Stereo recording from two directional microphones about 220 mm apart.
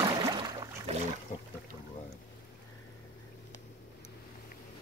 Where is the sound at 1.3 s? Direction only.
35° left (ahead or behind).